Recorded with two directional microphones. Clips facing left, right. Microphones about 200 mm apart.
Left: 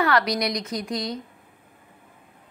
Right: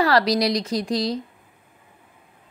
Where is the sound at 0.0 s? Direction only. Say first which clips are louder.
Right 4 dB; 35° right (ahead or behind).